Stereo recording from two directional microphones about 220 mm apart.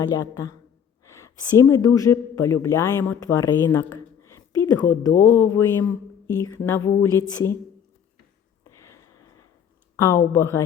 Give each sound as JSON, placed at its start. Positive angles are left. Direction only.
{"t": 0.1, "sound": "speech", "side_deg": 15}
{"t": 8.6, "sound": "a sound", "side_deg": 15}
{"t": 10.0, "sound": "speech", "side_deg": 15}